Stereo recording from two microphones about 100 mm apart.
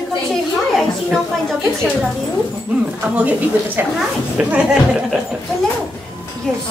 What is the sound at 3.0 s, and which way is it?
A woman's voice, 15° right (ahead or behind).